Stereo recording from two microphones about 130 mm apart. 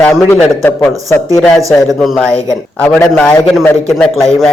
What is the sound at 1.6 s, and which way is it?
Speech, centre (ahead or behind).